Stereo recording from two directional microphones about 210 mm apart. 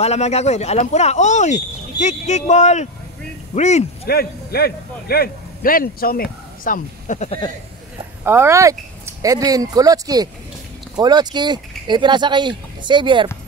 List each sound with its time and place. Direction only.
0.0 s speech: 30° left (ahead or behind)
4.1 s a man's voice: 45° left (ahead or behind)
8.2 s speech: 10° right (ahead or behind)